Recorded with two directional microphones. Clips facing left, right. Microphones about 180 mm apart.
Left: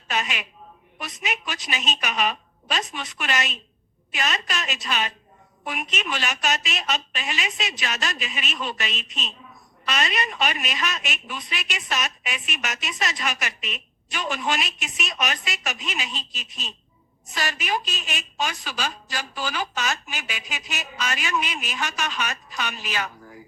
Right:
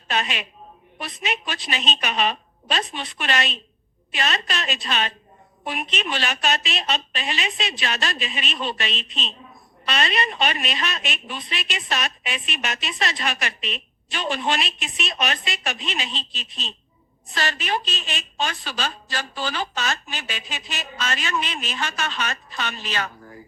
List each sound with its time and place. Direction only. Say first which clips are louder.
0.1 s a woman's voice: right 2 dB; 30° right (ahead or behind)
18.1 s a woman's voice: right 1 dB; 5° left (ahead or behind)